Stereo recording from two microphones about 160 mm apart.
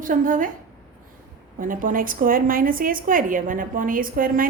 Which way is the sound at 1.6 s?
60° right (ahead or behind).